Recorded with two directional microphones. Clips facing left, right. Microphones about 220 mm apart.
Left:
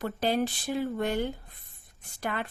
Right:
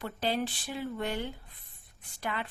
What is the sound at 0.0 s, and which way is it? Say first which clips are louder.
Speech: left 4 dB; 45° left (ahead or behind).